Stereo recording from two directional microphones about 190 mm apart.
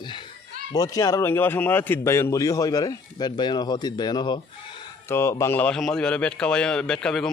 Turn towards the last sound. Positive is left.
turn(degrees=5)  # may be behind; listen again after turning